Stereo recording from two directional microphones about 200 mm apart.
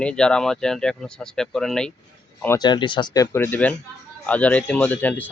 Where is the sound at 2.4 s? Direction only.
15° left (ahead or behind).